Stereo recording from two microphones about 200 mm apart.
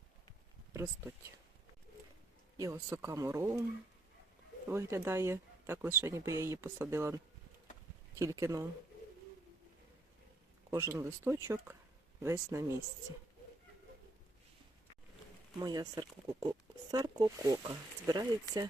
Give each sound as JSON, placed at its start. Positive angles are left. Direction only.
{"t": 0.7, "sound": "speech", "side_deg": -15}
{"t": 2.6, "sound": "speech", "side_deg": -15}
{"t": 4.7, "sound": "speech", "side_deg": -10}
{"t": 8.2, "sound": "speech", "side_deg": -15}
{"t": 10.7, "sound": "speech", "side_deg": -15}
{"t": 15.6, "sound": "speech", "side_deg": -20}